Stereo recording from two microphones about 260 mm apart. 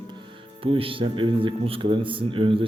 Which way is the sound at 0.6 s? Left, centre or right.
Right.